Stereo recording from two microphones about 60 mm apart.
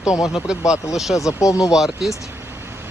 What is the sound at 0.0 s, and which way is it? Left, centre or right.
Speech, centre.